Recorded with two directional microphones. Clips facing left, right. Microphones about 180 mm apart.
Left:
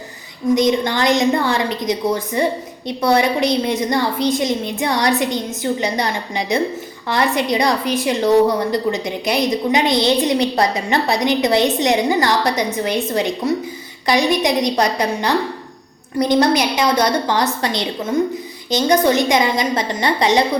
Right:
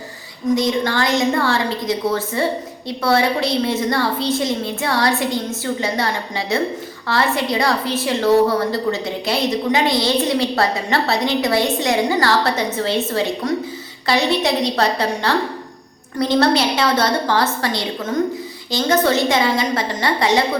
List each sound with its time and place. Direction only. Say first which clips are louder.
0.5 s a woman's voice: left 2 dB; 20° left (ahead or behind)
18.1 s a woman's voice: left 2 dB; 10° left (ahead or behind)